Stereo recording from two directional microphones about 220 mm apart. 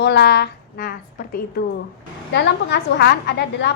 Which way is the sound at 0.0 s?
50° left (ahead or behind).